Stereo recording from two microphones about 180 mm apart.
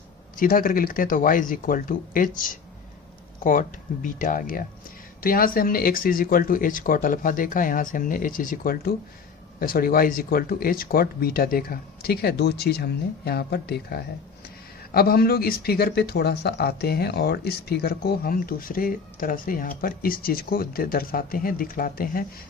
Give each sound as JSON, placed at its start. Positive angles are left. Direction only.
{"t": 0.3, "sound": "speech", "side_deg": 50}